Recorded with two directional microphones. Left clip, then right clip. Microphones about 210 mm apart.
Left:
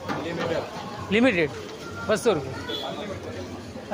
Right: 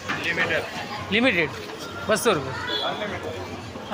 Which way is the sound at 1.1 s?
20° left (ahead or behind).